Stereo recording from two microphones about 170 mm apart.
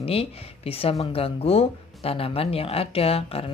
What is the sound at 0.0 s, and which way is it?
Speech, 35° left (ahead or behind).